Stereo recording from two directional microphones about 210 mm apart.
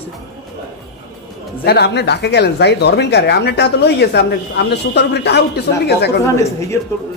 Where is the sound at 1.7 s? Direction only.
50° left (ahead or behind).